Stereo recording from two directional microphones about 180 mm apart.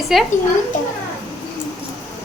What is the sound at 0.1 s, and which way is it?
Speech, centre (ahead or behind).